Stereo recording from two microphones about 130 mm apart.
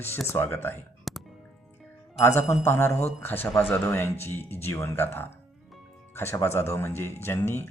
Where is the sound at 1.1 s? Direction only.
Centre (ahead or behind).